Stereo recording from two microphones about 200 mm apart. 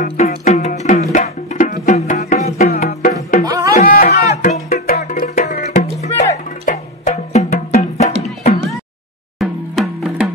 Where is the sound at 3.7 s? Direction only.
45° left (ahead or behind).